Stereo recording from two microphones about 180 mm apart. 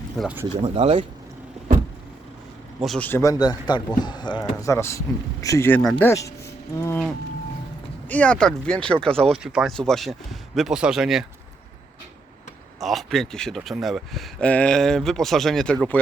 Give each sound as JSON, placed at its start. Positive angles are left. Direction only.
{"t": 0.2, "sound": "speech", "side_deg": -5}
{"t": 0.4, "sound": "speech", "side_deg": -35}
{"t": 2.8, "sound": "speech", "side_deg": 0}
{"t": 3.1, "sound": "speech", "side_deg": 15}
{"t": 6.1, "sound": "speech", "side_deg": 15}
{"t": 12.8, "sound": "speech", "side_deg": 0}